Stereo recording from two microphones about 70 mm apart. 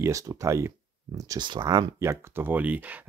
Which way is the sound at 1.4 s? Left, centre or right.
Right.